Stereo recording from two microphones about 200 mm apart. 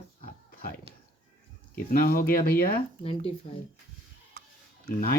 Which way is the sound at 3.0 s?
30° left (ahead or behind).